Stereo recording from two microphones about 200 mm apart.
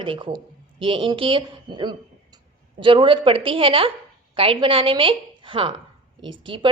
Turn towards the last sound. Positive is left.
turn(degrees=-25)  # may be behind; listen again after turning